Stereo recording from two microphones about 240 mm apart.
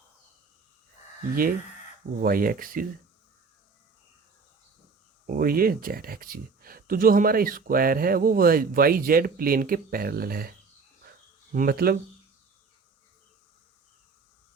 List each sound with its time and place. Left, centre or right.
2.1 s speech: right
5.2 s speech: right
11.5 s speech: right